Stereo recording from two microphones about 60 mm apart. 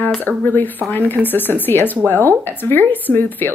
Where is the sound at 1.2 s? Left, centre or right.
Left.